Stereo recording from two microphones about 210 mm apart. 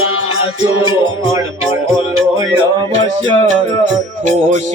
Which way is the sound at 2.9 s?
35° right (ahead or behind).